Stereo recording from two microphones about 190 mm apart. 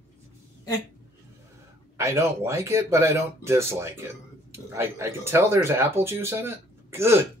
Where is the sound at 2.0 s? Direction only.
15° right (ahead or behind).